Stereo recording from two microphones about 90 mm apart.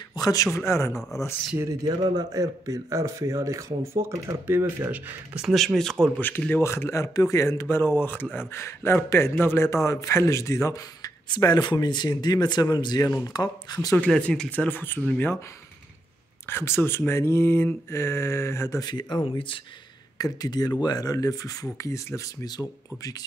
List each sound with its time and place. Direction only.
0.1 s speech: 45° left (ahead or behind)
0.7 s speech: 30° left (ahead or behind)
2.3 s speech: 40° right (ahead or behind); by 4.8 s 25° right (ahead or behind)
4.8 s speech: 10° right (ahead or behind)
5.5 s speech: centre (ahead or behind)
6.1 s speech: 15° left (ahead or behind); by 13.7 s 50° left (ahead or behind)
13.9 s speech: 15° left (ahead or behind)
16.4 s speech: 25° left (ahead or behind)
18.8 s speech: 50° left (ahead or behind)